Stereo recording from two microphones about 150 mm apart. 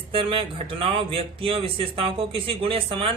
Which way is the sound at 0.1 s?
35° right (ahead or behind).